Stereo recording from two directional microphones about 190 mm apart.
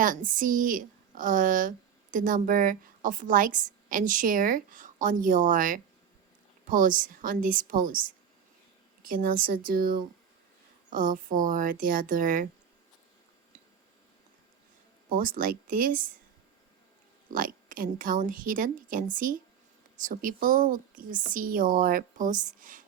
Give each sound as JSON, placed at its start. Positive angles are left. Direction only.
{"t": 0.0, "sound": "a woman's voice", "side_deg": -45}
{"t": 9.0, "sound": "a woman's voice", "side_deg": -50}
{"t": 15.1, "sound": "a woman's voice", "side_deg": -50}
{"t": 17.3, "sound": "a woman's voice", "side_deg": -45}